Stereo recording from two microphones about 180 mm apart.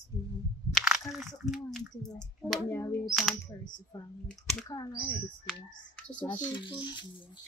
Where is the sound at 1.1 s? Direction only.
Centre (ahead or behind).